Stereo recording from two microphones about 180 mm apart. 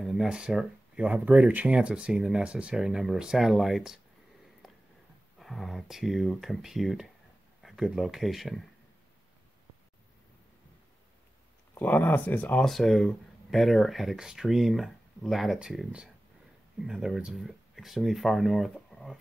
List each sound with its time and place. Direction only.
0.0 s speech: centre (ahead or behind)
5.4 s speech: centre (ahead or behind)
11.7 s speech: 10° left (ahead or behind)